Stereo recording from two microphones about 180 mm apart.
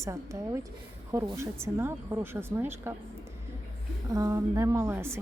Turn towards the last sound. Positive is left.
turn(degrees=-15)  # may be behind; listen again after turning